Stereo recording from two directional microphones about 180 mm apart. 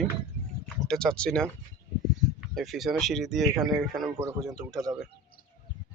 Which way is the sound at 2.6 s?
Centre (ahead or behind).